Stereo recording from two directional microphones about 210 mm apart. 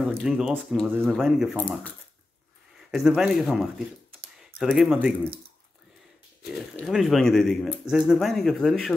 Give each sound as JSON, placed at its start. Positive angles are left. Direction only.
{"t": 0.0, "sound": "speech", "side_deg": -5}
{"t": 2.9, "sound": "speech", "side_deg": 0}
{"t": 6.5, "sound": "speech", "side_deg": 0}